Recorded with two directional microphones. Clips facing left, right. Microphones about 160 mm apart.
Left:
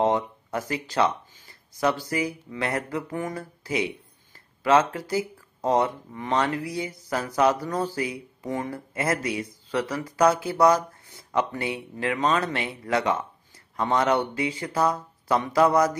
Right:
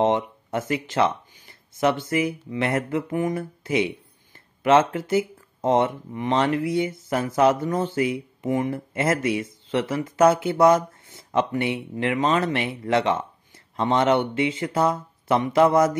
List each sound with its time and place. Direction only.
0.0 s speech: 25° right (ahead or behind)